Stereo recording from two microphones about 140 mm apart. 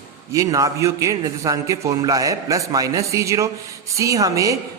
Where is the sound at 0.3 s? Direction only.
25° right (ahead or behind).